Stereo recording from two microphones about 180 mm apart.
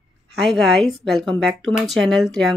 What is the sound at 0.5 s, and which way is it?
Speech, centre (ahead or behind).